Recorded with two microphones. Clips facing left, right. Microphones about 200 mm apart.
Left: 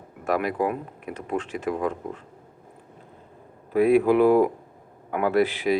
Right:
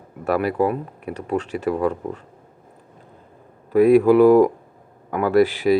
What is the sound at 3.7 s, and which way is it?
Speech, 45° right (ahead or behind).